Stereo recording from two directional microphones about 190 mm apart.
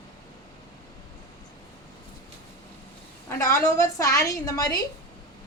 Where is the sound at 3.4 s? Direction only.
15° left (ahead or behind).